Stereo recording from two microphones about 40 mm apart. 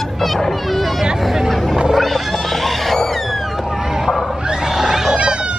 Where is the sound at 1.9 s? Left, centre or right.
Centre.